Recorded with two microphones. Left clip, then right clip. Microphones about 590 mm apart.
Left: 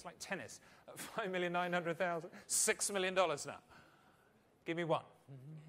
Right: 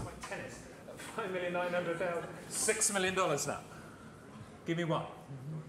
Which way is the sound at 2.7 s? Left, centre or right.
Left.